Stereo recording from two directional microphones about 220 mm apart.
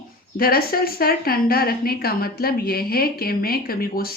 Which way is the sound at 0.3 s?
45° left (ahead or behind).